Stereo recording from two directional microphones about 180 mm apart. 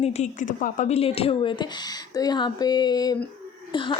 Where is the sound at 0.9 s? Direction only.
35° left (ahead or behind).